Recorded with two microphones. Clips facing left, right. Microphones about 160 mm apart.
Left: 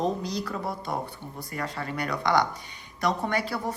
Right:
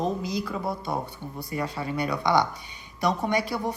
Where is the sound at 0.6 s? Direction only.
20° right (ahead or behind).